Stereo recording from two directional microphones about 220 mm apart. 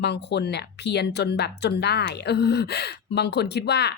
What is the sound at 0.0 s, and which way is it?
Speech, 50° left (ahead or behind).